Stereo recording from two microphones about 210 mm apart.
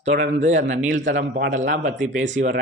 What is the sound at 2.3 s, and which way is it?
Speech, 35° right (ahead or behind).